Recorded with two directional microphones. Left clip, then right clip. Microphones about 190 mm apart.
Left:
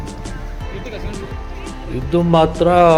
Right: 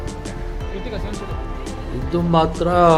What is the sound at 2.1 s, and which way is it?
Speech, 15° left (ahead or behind).